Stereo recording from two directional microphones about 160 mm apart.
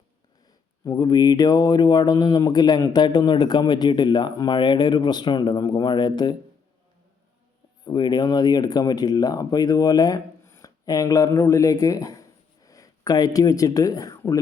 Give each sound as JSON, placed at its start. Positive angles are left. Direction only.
{"t": 0.9, "sound": "speech", "side_deg": 25}
{"t": 7.9, "sound": "speech", "side_deg": 25}